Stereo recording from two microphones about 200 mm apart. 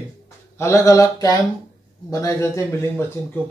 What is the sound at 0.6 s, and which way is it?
A man's voice, 15° left (ahead or behind).